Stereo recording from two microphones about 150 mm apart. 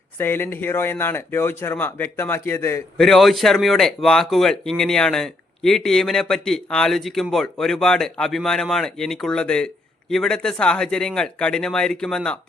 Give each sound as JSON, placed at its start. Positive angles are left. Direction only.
{"t": 0.2, "sound": "speech", "side_deg": 15}
{"t": 3.0, "sound": "speech", "side_deg": 0}